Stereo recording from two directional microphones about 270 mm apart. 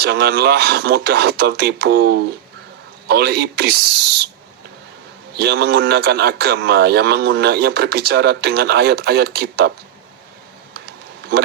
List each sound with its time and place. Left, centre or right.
0.0 s a man's voice: right
5.4 s a man's voice: right